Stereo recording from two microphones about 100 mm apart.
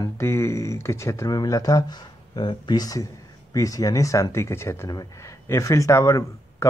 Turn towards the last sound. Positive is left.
turn(degrees=30)  # may be behind; listen again after turning